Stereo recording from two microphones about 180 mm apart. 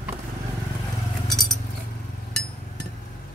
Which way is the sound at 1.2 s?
Centre (ahead or behind).